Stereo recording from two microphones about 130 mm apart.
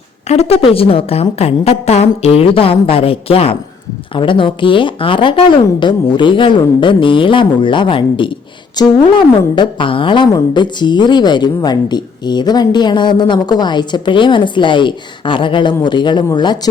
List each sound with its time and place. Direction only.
0.3 s a woman's voice: 50° left (ahead or behind); by 16.6 s 35° left (ahead or behind)